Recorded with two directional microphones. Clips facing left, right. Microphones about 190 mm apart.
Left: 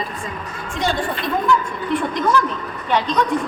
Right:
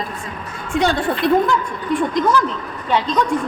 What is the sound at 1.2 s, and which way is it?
Speech, 70° right (ahead or behind).